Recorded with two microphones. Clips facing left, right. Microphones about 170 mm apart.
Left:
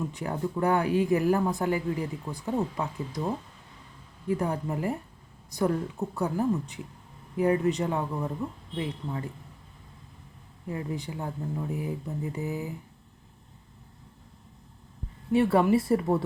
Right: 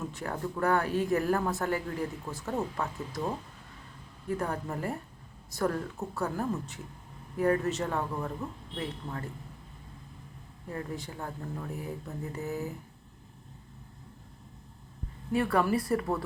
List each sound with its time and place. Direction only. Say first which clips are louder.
0.1 s speech: left 4 dB; 15° left (ahead or behind)
4.3 s speech: left 4 dB; 15° left (ahead or behind)
10.7 s speech: left 4 dB; 15° left (ahead or behind)
15.3 s speech: left 5 dB; 25° left (ahead or behind)